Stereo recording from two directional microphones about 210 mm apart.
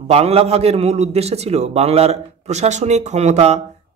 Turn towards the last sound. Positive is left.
turn(degrees=-30)  # may be behind; listen again after turning